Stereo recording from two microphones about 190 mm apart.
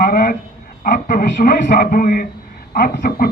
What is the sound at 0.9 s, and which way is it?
Speech, 45° left (ahead or behind).